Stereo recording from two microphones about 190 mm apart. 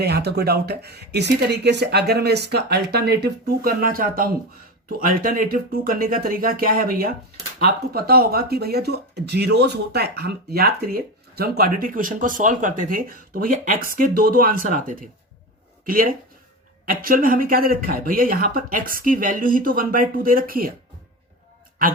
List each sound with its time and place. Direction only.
0.0 s speech: 60° right (ahead or behind)